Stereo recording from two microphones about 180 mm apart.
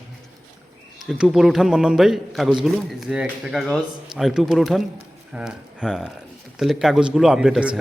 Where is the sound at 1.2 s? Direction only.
Centre (ahead or behind).